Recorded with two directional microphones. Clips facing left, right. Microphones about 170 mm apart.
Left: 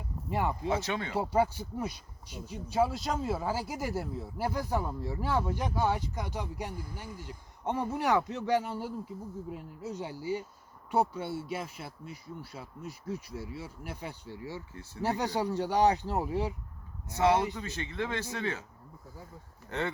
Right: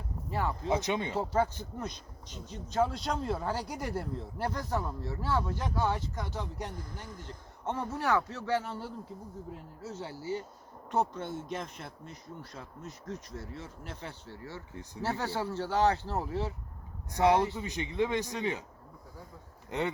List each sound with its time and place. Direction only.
0.3 s speech: 15° left (ahead or behind)
0.7 s speech: 15° right (ahead or behind)
1.1 s speech: 10° left (ahead or behind)
14.7 s speech: 15° right (ahead or behind)
15.0 s speech: 15° left (ahead or behind)
17.2 s speech: 15° right (ahead or behind)
19.7 s speech: 15° right (ahead or behind)